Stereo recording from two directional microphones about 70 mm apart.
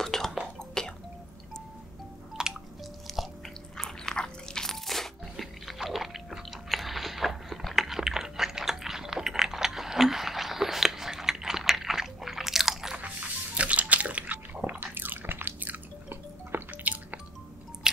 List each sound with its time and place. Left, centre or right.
0.0 s whispering: centre
0.6 s a sound: centre
2.4 s drip: centre
3.1 s chewing: centre
3.7 s crunch: centre
13.0 s a sound: centre